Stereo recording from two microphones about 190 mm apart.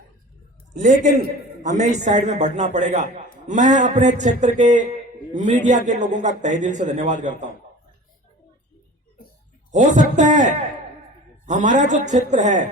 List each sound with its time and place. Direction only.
0.7 s a man's voice: 40° right (ahead or behind)
9.7 s a man's voice: 40° right (ahead or behind)